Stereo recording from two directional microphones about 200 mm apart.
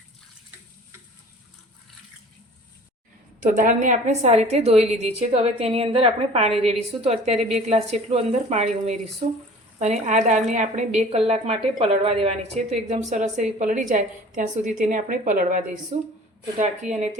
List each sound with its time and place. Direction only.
3.4 s a woman's voice: 40° right (ahead or behind)